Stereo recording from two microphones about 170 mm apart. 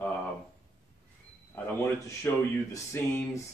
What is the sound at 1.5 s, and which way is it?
Speech, 15° left (ahead or behind).